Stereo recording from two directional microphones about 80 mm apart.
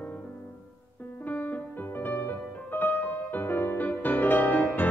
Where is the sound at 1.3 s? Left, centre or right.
Left.